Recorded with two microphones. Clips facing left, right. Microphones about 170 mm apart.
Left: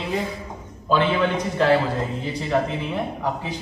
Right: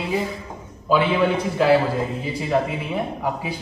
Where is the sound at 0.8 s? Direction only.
5° right (ahead or behind).